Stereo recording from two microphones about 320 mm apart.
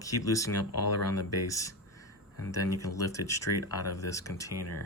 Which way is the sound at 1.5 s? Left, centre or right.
Centre.